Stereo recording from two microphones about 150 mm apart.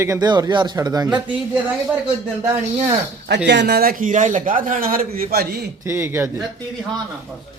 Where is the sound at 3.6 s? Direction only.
90° right.